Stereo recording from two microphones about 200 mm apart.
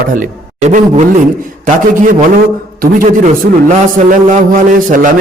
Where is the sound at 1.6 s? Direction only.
40° right (ahead or behind).